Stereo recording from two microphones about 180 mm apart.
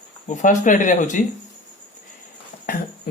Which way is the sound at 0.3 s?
45° left (ahead or behind).